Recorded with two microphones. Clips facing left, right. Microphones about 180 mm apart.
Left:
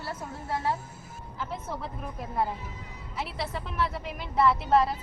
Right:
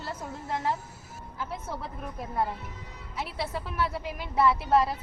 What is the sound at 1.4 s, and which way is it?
A woman's voice, centre (ahead or behind).